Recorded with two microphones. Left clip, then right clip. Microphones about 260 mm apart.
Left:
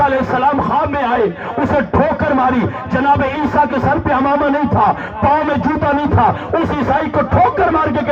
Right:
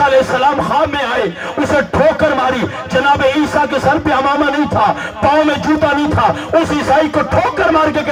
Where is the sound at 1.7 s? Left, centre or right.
Right.